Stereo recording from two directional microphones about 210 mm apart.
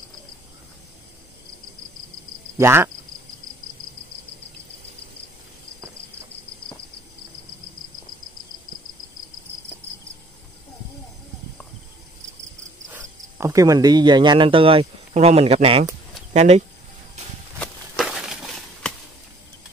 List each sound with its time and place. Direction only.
2.6 s cricket: 10° right (ahead or behind)
12.9 s speech: 15° right (ahead or behind); by 16.6 s 30° right (ahead or behind)
17.6 s a sound: centre (ahead or behind)